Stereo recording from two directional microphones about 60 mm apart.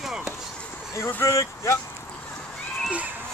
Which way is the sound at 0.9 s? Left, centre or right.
Left.